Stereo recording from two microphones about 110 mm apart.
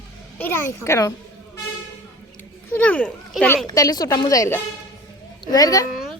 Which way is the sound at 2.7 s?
15° left (ahead or behind).